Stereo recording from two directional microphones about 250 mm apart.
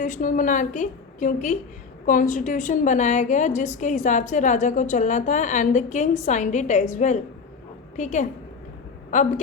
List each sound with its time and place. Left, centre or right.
0.0 s a woman's voice: left